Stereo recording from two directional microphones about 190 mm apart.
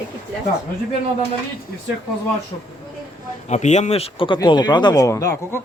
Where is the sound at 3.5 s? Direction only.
35° left (ahead or behind).